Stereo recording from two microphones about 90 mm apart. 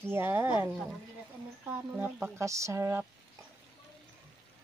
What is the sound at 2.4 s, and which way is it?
Speech, 35° right (ahead or behind).